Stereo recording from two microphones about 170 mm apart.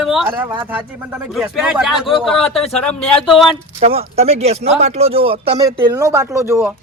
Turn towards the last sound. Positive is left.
turn(degrees=-15)  # may be behind; listen again after turning